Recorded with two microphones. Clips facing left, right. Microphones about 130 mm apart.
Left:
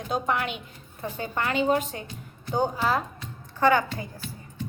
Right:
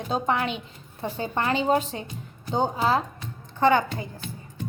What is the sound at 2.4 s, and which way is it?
Speech, 25° right (ahead or behind).